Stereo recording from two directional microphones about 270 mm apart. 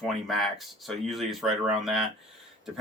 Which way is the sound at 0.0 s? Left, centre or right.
Centre.